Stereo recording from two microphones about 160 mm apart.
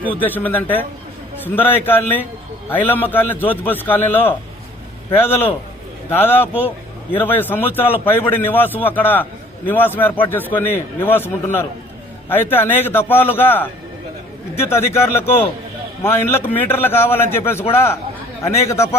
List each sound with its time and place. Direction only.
0.2 s a man's voice: 10° left (ahead or behind)